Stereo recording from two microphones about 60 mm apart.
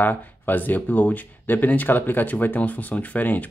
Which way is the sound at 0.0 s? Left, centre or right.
Left.